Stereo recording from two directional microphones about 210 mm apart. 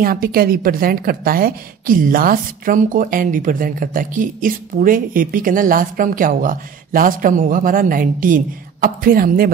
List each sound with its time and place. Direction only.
0.0 s a woman's voice: 45° right (ahead or behind)